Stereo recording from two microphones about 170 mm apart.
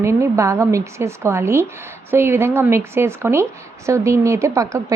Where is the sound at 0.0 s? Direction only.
15° right (ahead or behind).